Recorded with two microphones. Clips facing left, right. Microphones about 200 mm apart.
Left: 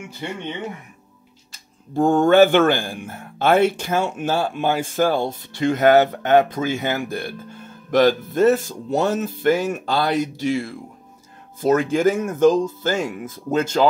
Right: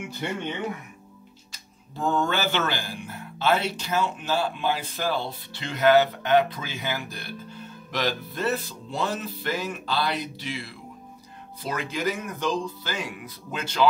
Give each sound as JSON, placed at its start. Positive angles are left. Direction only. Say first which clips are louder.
{"t": 1.5, "sound": "speech", "louder": "left 17 dB", "side_deg": 50}